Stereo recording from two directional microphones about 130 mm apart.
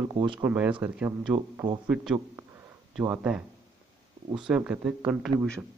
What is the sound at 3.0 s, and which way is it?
Speech, 15° right (ahead or behind).